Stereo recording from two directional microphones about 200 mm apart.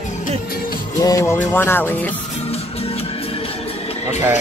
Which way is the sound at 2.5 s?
30° left (ahead or behind).